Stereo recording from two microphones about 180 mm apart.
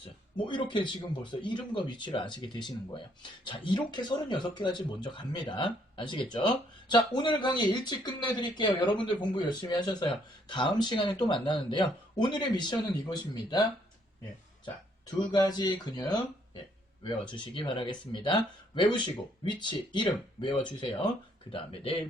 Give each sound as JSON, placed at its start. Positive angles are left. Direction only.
{"t": 0.3, "sound": "speech", "side_deg": 25}
{"t": 15.3, "sound": "speech", "side_deg": 20}
{"t": 17.3, "sound": "speech", "side_deg": 25}